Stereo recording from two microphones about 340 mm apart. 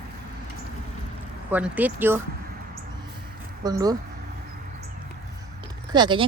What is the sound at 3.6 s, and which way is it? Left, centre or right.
Speech, centre.